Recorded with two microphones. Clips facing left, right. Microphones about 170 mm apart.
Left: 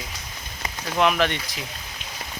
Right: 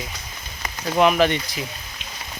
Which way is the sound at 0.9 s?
5° right (ahead or behind).